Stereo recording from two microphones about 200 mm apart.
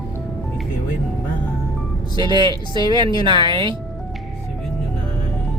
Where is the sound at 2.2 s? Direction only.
20° right (ahead or behind).